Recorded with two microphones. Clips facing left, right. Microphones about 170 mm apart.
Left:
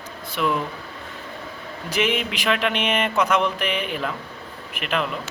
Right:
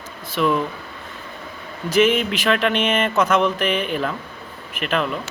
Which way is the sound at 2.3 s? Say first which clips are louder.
Right 3 dB; 15° left (ahead or behind).